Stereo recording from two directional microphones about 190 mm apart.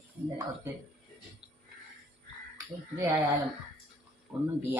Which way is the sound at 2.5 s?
20° right (ahead or behind).